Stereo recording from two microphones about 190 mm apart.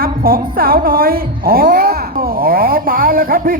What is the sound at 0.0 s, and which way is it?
A woman's voice, 50° right (ahead or behind).